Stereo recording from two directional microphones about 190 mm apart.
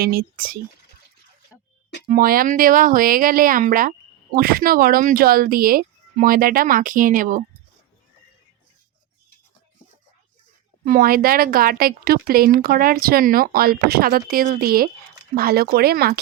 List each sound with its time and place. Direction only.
0.0 s speech: 50° right (ahead or behind)
2.0 s speech: 50° right (ahead or behind)
10.8 s speech: 45° right (ahead or behind)